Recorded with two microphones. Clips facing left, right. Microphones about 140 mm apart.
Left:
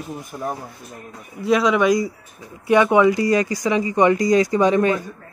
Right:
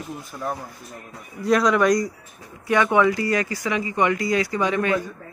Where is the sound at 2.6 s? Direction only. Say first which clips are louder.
Left 4 dB; 15° left (ahead or behind).